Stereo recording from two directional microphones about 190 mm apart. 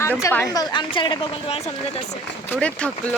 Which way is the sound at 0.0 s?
15° left (ahead or behind).